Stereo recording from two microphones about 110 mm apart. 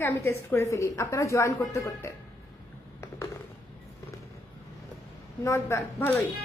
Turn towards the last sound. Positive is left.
turn(degrees=20)  # may be behind; listen again after turning